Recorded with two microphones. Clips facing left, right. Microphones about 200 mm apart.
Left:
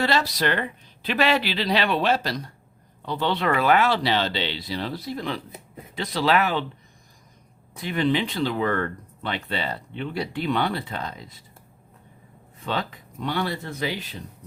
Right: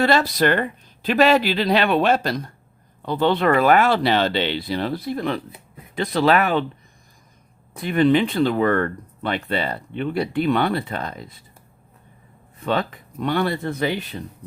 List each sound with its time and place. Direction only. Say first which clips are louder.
0.0 s speech: right 5 dB; 50° right (ahead or behind)
7.8 s speech: right 6 dB; 55° right (ahead or behind)
12.6 s speech: right 6 dB; 55° right (ahead or behind)